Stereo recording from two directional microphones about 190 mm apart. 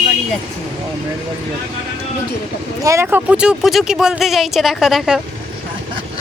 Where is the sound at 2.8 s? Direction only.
15° right (ahead or behind).